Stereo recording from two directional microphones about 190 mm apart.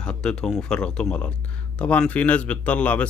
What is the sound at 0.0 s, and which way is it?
Speech, 5° left (ahead or behind).